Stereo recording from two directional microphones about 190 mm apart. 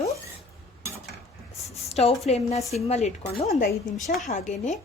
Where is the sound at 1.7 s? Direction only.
35° left (ahead or behind).